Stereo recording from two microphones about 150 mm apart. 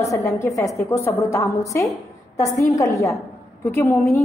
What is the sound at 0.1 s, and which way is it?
A woman's voice, 20° left (ahead or behind).